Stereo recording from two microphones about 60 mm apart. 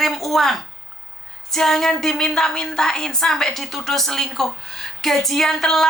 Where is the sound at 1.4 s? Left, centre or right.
Centre.